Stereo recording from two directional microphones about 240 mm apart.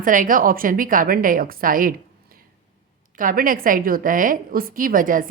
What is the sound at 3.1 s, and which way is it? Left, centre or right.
Speech, right.